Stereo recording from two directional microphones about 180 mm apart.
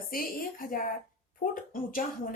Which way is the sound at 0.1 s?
50° left (ahead or behind).